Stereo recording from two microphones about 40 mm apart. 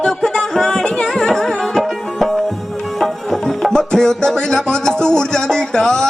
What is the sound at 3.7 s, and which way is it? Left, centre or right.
Music, centre.